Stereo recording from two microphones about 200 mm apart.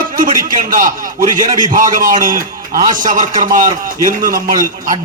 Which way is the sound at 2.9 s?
40° right (ahead or behind).